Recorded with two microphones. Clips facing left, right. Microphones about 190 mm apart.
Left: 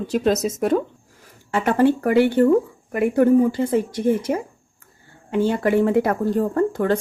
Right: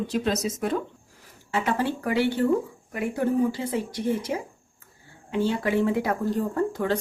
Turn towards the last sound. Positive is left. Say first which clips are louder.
# left 6 dB
turn(degrees=50)  # may be behind; listen again after turning